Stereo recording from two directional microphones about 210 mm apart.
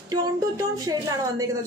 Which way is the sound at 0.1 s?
15° right (ahead or behind).